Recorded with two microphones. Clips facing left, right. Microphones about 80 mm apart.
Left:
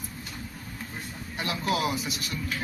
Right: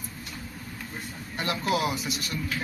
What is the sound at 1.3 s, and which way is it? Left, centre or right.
A man's voice, centre.